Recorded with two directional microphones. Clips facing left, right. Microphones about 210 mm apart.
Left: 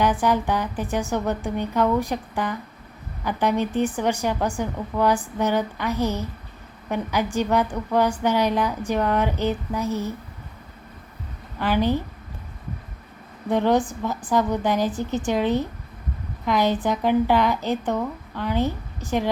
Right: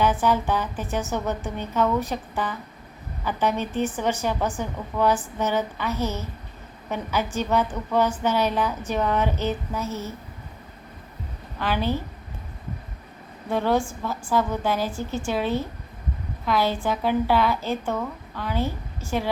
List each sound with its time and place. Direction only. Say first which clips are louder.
0.0 s a woman's voice: left 1 dB; 15° left (ahead or behind)
11.6 s a woman's voice: left 4 dB; 15° left (ahead or behind)
13.5 s a woman's voice: left 3 dB; 15° left (ahead or behind)